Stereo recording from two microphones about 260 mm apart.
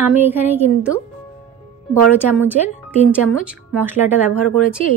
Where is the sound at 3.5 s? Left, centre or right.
Centre.